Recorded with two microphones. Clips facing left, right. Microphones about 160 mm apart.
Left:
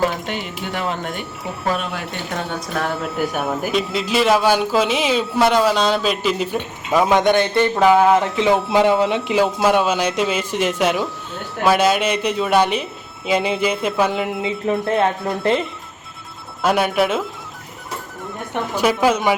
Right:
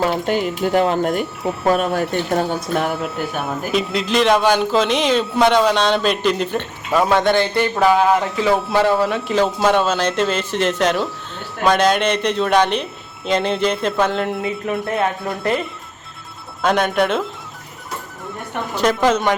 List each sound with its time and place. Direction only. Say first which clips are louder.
0.1 s speech: right 7 dB; 40° right (ahead or behind)
3.0 s a man's voice: left 1 dB; 5° left (ahead or behind); by 9.3 s 20° left (ahead or behind)
9.3 s speech: right 1 dB; 10° left (ahead or behind)
14.4 s speech: left 2 dB; 25° left (ahead or behind)
16.6 s a man's voice: even; 5° left (ahead or behind)
18.8 s speech: right 1 dB; 10° left (ahead or behind)